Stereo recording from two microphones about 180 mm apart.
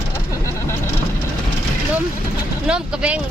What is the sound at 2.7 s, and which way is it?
Speech, 5° right (ahead or behind).